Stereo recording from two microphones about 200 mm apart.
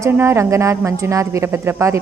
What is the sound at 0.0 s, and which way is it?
A woman's voice, 10° right (ahead or behind).